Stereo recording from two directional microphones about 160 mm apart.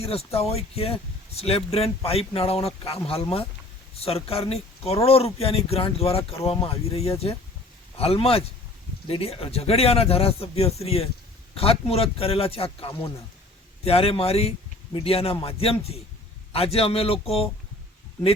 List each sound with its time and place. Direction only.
0.0 s speech: 40° left (ahead or behind)